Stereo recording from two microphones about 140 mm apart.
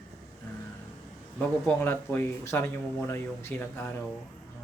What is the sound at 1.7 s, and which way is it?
Speech, 15° left (ahead or behind).